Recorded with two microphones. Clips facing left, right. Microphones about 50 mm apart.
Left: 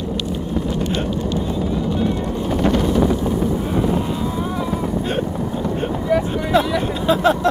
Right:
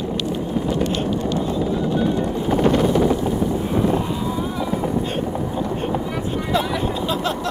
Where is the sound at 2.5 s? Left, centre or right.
Centre.